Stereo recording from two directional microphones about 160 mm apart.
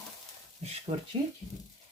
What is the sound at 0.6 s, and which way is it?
Speech, 45° right (ahead or behind).